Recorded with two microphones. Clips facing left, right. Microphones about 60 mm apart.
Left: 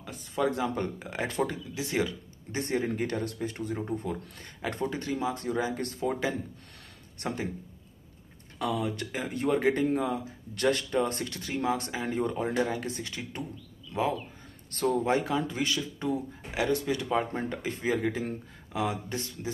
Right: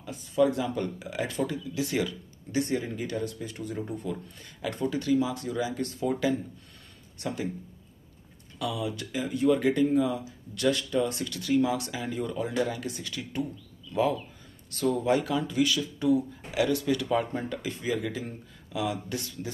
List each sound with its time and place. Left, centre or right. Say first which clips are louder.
0.0 s speech: right 5 dB; left
1.8 s speech: right 1 dB; left
4.6 s speech: right 2 dB; left
8.5 s speech: left 1 dB; left
14.7 s speech: right 1 dB; left